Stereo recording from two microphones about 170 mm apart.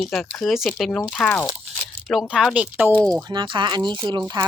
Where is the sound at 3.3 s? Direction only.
25° right (ahead or behind).